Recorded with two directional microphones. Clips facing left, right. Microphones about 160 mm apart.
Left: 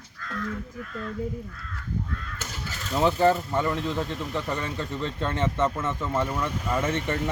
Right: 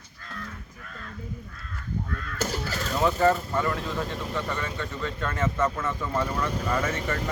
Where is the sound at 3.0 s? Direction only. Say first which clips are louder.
Left 1 dB; 30° left (ahead or behind).